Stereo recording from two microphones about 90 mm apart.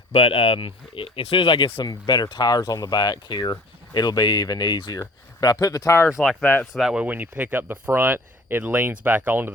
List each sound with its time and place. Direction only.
0.1 s speech: 90° left; by 1.8 s 75° left (ahead or behind)
1.8 s speech: 50° left (ahead or behind)
6.4 s speech: 20° left (ahead or behind)
6.7 s speech: 5° right (ahead or behind)
7.0 s speech: 20° right (ahead or behind)